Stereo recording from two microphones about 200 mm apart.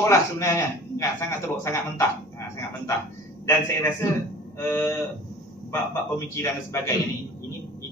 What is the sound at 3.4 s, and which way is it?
A man's voice, 15° left (ahead or behind).